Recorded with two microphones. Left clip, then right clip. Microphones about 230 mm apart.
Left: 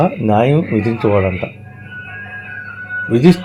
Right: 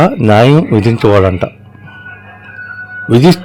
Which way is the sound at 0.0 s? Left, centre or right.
Right.